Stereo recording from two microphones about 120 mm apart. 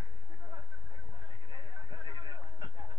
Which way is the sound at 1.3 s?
40° left (ahead or behind).